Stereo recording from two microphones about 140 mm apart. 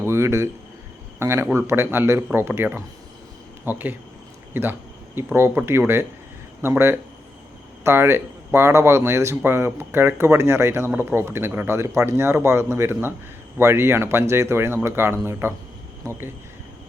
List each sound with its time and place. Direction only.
0.0 s speech: 20° right (ahead or behind)